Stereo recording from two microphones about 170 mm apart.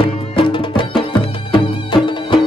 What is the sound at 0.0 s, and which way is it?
Music, 30° left (ahead or behind).